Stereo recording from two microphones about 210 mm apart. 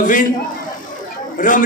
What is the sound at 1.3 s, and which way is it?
Speech, 40° left (ahead or behind).